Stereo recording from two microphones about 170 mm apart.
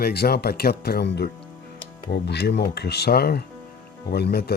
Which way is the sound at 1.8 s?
70° left (ahead or behind).